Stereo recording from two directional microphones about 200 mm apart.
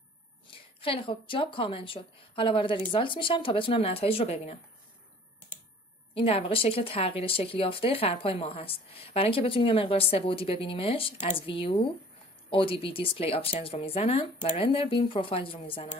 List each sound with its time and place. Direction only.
0.5 s a woman's voice: 25° left (ahead or behind)
6.1 s a woman's voice: 30° left (ahead or behind)